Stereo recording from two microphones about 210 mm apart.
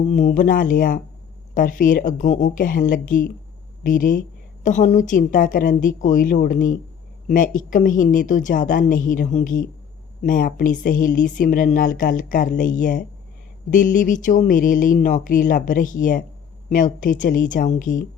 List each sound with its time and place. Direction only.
0.0 s speech: 35° left (ahead or behind)